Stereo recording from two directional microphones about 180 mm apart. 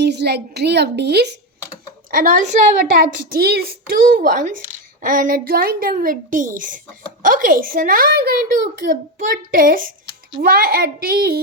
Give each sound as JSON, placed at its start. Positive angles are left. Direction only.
{"t": 0.0, "sound": "a woman's voice", "side_deg": -70}
{"t": 2.0, "sound": "a woman's voice", "side_deg": -50}